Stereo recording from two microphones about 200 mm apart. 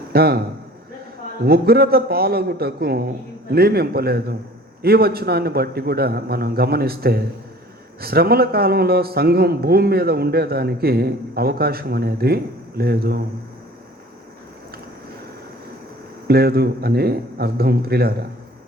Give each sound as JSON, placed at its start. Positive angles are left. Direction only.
{"t": 0.1, "sound": "a man's voice", "side_deg": -50}
{"t": 1.5, "sound": "a man's voice", "side_deg": -50}
{"t": 16.2, "sound": "a man's voice", "side_deg": -50}